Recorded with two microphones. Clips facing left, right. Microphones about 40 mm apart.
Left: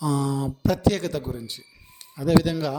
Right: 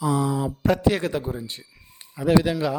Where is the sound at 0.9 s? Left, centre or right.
Right.